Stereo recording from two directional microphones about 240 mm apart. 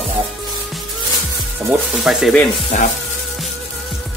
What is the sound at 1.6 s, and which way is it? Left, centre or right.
Sizzle, centre.